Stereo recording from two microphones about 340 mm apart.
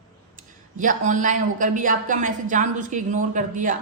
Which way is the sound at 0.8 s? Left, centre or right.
Right.